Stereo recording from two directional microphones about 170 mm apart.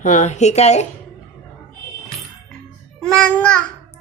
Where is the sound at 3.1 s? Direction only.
5° left (ahead or behind).